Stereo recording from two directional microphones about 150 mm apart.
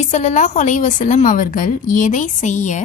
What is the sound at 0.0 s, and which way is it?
A woman's voice, 50° left (ahead or behind).